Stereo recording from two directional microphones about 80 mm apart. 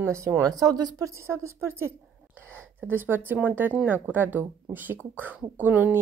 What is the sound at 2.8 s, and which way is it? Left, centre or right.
Speech, right.